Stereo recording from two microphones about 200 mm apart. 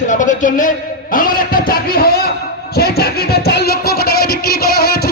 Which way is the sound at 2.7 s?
50° left (ahead or behind).